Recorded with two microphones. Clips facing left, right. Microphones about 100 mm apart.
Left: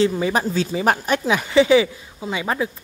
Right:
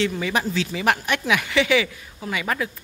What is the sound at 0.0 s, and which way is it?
Speech, 35° left (ahead or behind).